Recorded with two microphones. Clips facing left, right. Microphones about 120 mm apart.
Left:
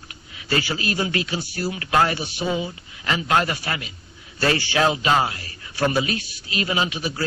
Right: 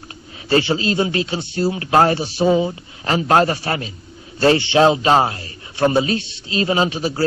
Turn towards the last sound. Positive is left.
turn(degrees=-35)  # may be behind; listen again after turning